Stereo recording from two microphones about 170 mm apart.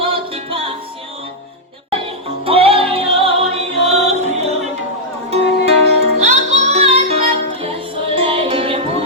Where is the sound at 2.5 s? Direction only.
35° right (ahead or behind).